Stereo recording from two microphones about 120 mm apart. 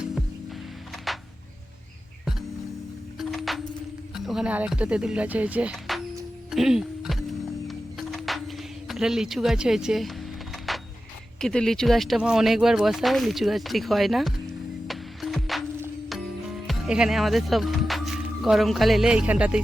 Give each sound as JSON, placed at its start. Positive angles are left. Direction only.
{"t": 1.1, "sound": "music", "side_deg": 0}
{"t": 3.2, "sound": "music", "side_deg": 0}
{"t": 4.1, "sound": "speech", "side_deg": -5}
{"t": 6.5, "sound": "music", "side_deg": -5}
{"t": 10.7, "sound": "vehicle", "side_deg": 0}
{"t": 11.3, "sound": "speech", "side_deg": 5}
{"t": 14.8, "sound": "music", "side_deg": 0}
{"t": 16.6, "sound": "speech", "side_deg": -5}